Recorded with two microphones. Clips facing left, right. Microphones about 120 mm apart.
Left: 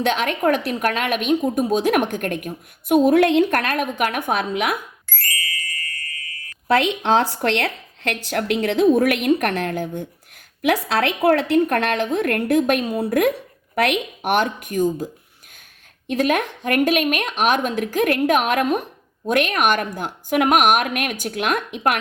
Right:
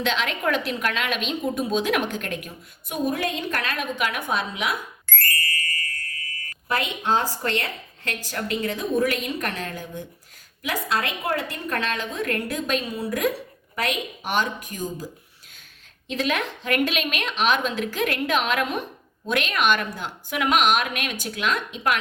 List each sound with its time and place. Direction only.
0.0 s a woman's voice: 50° left (ahead or behind)
3.0 s a woman's voice: 70° left (ahead or behind)
6.7 s a woman's voice: 80° left; by 10.1 s 55° left (ahead or behind)
10.6 s a woman's voice: 70° left (ahead or behind)